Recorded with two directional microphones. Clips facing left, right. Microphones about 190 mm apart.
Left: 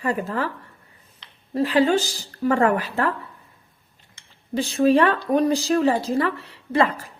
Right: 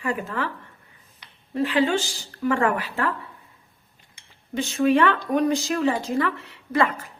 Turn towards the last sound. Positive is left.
turn(degrees=30)  # may be behind; listen again after turning